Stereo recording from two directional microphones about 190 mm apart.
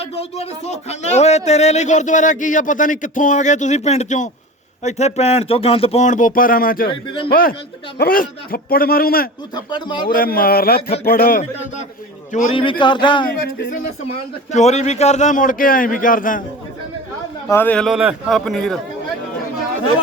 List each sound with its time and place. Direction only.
0.0 s speech: 35° left (ahead or behind)
6.8 s speech: 25° left (ahead or behind)
7.3 s speech: 50° left (ahead or behind)
9.6 s speech: 25° left (ahead or behind)
10.1 s speech: 50° left (ahead or behind)
12.5 s speech: 25° left (ahead or behind)
14.5 s speech: 35° left (ahead or behind)
17.5 s a man's voice: 10° left (ahead or behind)